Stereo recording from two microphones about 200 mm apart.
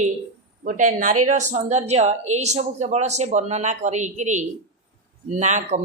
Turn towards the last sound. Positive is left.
turn(degrees=-35)  # may be behind; listen again after turning